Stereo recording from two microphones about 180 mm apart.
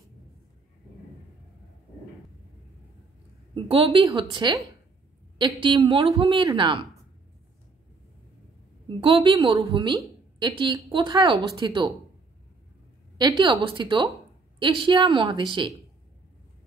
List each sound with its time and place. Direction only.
3.5 s a woman's voice: 30° right (ahead or behind)
5.6 s a woman's voice: 30° right (ahead or behind)
8.8 s a woman's voice: 25° right (ahead or behind)
13.2 s a woman's voice: 25° right (ahead or behind)